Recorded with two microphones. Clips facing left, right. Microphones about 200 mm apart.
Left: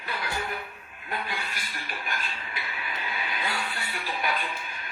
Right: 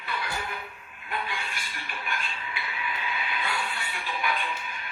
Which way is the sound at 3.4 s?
40° left (ahead or behind).